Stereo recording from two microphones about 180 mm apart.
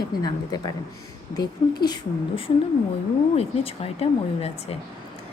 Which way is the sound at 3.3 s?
35° left (ahead or behind).